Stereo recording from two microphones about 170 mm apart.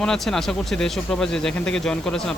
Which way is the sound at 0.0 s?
5° left (ahead or behind).